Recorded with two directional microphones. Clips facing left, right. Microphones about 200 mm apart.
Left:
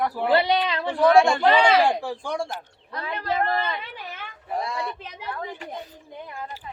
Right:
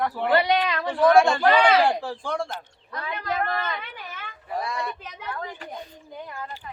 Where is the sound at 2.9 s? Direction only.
30° left (ahead or behind).